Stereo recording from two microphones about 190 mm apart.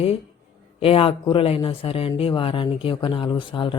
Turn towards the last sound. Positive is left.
turn(degrees=25)  # may be behind; listen again after turning